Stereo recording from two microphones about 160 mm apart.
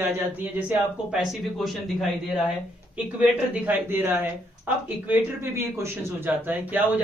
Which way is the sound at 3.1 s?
10° right (ahead or behind).